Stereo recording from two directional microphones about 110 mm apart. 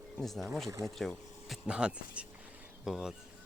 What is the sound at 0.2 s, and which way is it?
Speech, centre (ahead or behind).